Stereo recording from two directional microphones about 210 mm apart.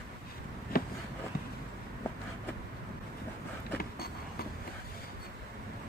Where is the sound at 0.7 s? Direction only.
45° left (ahead or behind).